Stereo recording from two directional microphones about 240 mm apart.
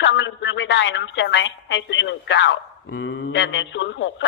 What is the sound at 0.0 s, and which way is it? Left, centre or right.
A woman's voice, left.